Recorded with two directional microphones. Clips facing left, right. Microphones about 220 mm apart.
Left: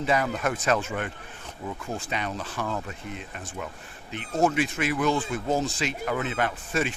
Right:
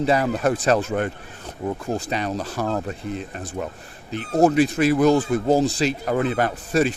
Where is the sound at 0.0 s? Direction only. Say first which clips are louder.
Right 6 dB; 35° right (ahead or behind).